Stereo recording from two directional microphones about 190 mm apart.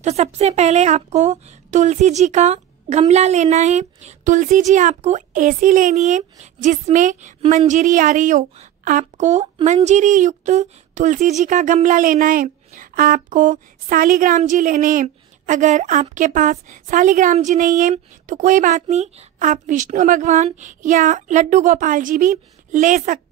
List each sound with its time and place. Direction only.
0.0 s speech: 35° right (ahead or behind)